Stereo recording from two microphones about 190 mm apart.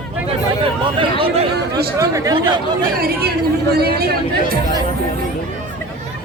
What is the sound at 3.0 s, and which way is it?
Speech, 55° right (ahead or behind).